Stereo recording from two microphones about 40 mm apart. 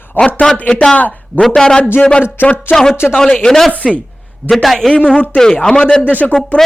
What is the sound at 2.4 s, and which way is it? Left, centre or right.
Speech, left.